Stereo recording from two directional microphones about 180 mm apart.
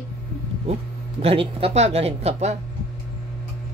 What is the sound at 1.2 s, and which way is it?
A woman's voice, 30° right (ahead or behind).